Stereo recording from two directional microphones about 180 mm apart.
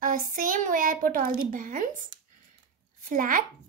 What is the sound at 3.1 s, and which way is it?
Speech, 50° right (ahead or behind).